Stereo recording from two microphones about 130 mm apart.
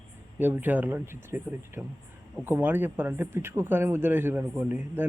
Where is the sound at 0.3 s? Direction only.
15° right (ahead or behind).